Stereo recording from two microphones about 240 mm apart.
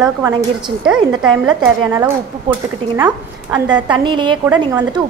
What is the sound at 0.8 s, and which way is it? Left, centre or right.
A woman's voice, centre.